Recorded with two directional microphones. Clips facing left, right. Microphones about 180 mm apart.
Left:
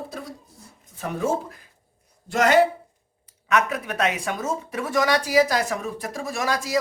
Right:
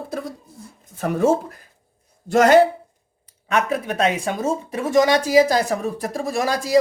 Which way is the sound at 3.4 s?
30° right (ahead or behind).